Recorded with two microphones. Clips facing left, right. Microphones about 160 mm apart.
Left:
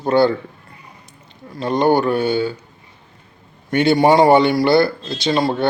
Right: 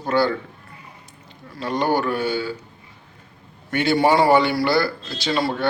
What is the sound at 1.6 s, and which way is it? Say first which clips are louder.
Speech: left 6 dB; 20° left (ahead or behind).